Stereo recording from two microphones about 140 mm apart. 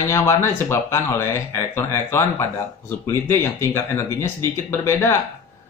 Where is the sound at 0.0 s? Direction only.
20° left (ahead or behind).